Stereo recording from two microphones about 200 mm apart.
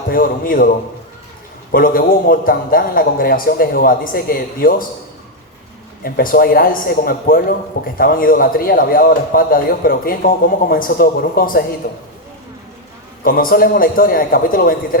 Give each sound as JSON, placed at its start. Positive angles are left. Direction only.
{"t": 0.1, "sound": "a man's voice", "side_deg": 45}
{"t": 1.7, "sound": "a man's voice", "side_deg": 45}
{"t": 6.1, "sound": "a man's voice", "side_deg": 50}
{"t": 13.2, "sound": "a man's voice", "side_deg": 45}